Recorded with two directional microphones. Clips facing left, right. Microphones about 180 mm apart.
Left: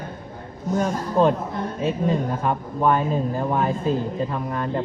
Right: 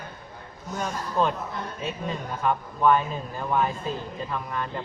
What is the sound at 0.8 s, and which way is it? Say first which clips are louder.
Speech: left 5 dB; 35° left (ahead or behind).